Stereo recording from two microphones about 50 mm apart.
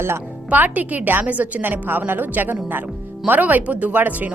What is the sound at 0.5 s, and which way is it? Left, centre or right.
A woman's voice, right.